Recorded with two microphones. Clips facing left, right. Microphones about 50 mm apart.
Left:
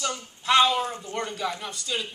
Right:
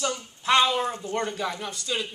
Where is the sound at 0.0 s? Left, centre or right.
Centre.